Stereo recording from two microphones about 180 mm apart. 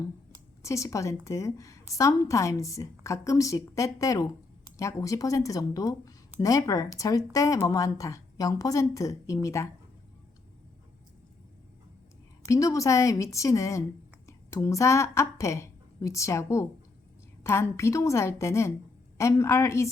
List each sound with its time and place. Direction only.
0.6 s speech: 15° left (ahead or behind)
12.5 s speech: 15° left (ahead or behind)